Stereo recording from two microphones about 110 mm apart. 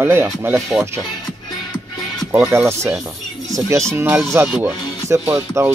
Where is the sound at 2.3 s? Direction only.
20° right (ahead or behind).